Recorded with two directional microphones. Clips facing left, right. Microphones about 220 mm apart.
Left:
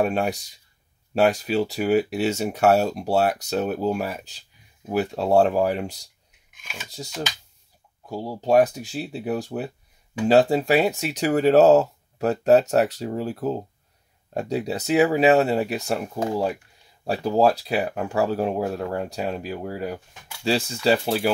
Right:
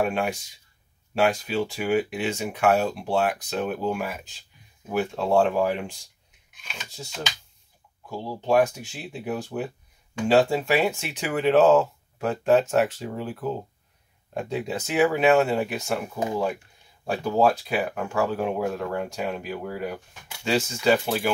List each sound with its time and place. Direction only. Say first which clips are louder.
0.0 s speech: left 2 dB; 40° left (ahead or behind)
6.6 s filing: left 1 dB; 5° left (ahead or behind)
8.1 s speech: left 3 dB; 35° left (ahead or behind)